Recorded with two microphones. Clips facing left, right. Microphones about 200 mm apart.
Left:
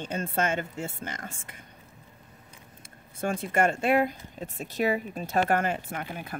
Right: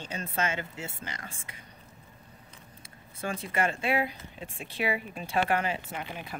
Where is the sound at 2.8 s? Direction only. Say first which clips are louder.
Left 5 dB; 50° left (ahead or behind).